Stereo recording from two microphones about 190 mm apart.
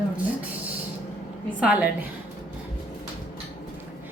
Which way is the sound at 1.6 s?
5° right (ahead or behind).